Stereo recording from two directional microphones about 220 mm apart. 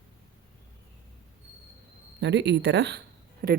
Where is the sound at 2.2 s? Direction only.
50° right (ahead or behind).